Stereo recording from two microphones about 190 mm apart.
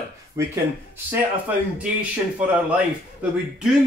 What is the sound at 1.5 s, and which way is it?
Speech, 10° right (ahead or behind).